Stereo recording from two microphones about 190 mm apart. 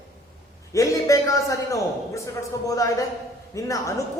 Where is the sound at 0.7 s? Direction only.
15° left (ahead or behind).